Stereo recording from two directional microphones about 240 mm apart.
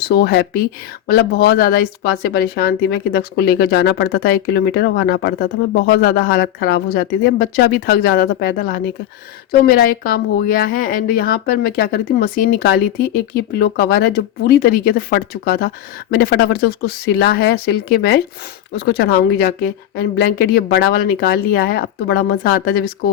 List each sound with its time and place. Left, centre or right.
0.0 s speech: left